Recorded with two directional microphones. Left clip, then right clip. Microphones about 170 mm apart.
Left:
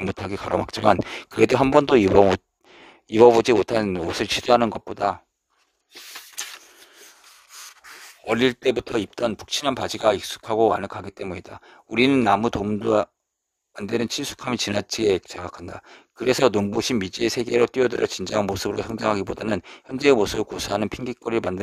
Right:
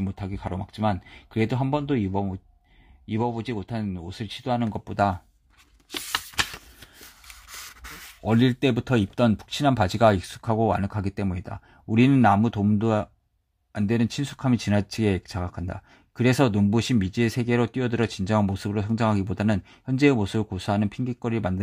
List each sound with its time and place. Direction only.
0.2 s speech: 45° left (ahead or behind)
7.5 s a sound: 10° left (ahead or behind)
8.3 s speech: 30° left (ahead or behind)